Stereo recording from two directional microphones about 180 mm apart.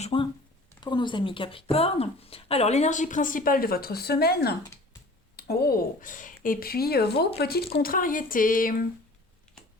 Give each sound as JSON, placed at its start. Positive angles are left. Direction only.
{"t": 0.0, "sound": "a woman's voice", "side_deg": 30}